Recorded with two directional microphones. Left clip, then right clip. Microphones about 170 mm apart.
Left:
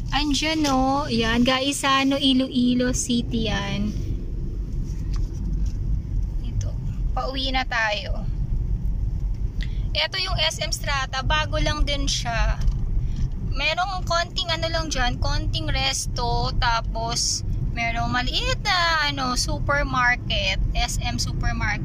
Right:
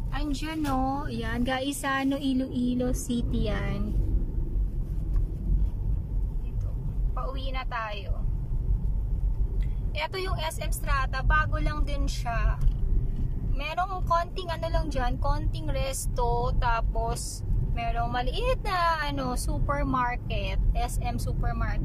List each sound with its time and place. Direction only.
0.1 s speech: centre (ahead or behind)
3.1 s a woman's voice: 50° left (ahead or behind)
7.2 s a woman's voice: centre (ahead or behind)
9.9 s speech: 10° right (ahead or behind)
13.6 s speech: 10° right (ahead or behind)